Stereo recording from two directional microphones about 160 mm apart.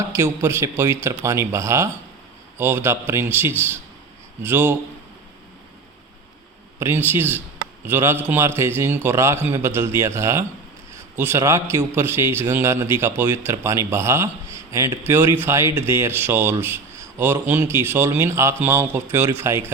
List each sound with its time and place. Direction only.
0.0 s a man's voice: 15° right (ahead or behind)
6.7 s a man's voice: 15° right (ahead or behind)